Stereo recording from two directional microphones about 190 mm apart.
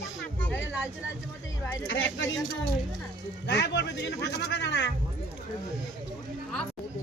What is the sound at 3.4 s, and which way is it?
A man's voice, 65° left (ahead or behind).